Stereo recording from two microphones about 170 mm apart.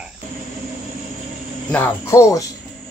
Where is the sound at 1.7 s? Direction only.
15° left (ahead or behind).